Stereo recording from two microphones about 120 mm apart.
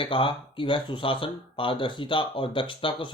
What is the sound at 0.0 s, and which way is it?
Speech, 45° left (ahead or behind).